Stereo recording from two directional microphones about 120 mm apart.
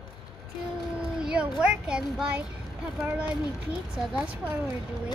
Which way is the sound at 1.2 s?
5° right (ahead or behind).